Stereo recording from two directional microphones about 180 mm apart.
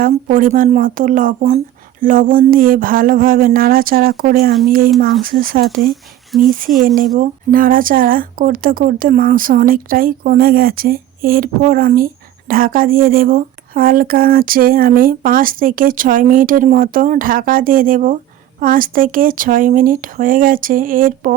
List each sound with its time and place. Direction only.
0.0 s speech: 50° right (ahead or behind)
5.9 s speech: centre (ahead or behind)
6.6 s speech: 50° right (ahead or behind)